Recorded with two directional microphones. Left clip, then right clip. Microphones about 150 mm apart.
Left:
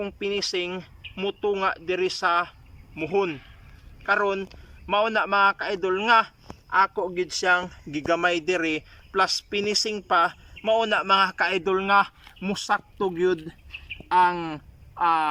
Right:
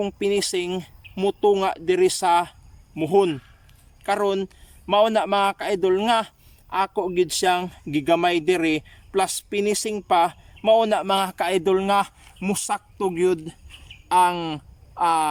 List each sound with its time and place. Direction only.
0.0 s speech: 25° right (ahead or behind)
7.4 s a man's voice: 35° right (ahead or behind)